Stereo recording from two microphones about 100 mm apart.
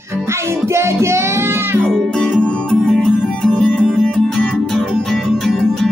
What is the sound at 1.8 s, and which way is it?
Music, 5° left (ahead or behind).